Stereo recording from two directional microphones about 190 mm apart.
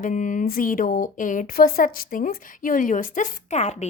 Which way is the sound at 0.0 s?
45° left (ahead or behind).